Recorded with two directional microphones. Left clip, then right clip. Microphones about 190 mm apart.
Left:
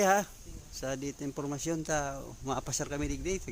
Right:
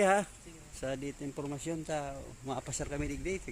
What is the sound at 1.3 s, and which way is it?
Speech, 35° left (ahead or behind).